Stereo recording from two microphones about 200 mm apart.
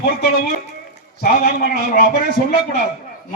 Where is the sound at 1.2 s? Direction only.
50° left (ahead or behind).